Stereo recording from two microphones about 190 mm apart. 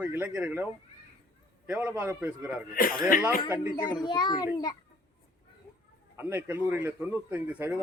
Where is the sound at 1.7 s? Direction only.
5° right (ahead or behind).